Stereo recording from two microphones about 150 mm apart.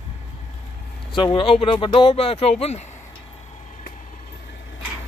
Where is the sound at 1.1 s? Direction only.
35° left (ahead or behind).